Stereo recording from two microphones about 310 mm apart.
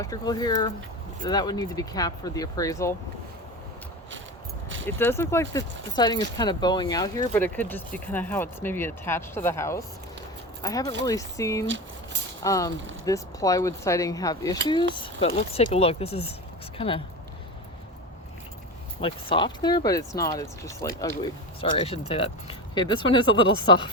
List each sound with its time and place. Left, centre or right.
0.0 s speech: centre
4.9 s speech: centre
19.0 s speech: centre